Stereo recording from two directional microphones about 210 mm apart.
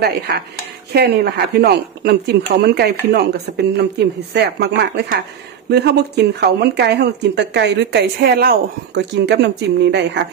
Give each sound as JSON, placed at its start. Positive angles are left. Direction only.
{"t": 0.0, "sound": "speech", "side_deg": -50}